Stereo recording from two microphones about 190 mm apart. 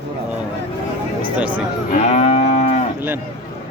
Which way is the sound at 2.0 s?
35° left (ahead or behind).